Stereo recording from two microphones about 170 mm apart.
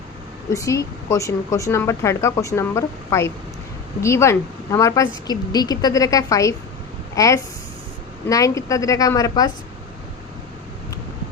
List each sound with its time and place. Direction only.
0.5 s a woman's voice: 20° left (ahead or behind)